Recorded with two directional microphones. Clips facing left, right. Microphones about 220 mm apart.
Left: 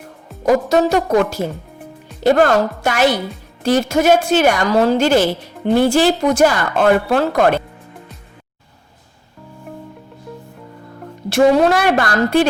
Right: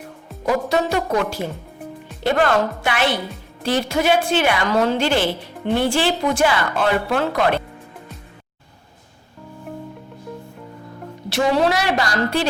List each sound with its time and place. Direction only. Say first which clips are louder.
0.4 s a woman's voice: left 6 dB; 45° left (ahead or behind)
11.3 s a woman's voice: left 6 dB; 50° left (ahead or behind)